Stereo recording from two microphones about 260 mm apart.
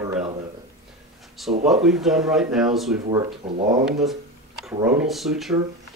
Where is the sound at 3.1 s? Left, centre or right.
Centre.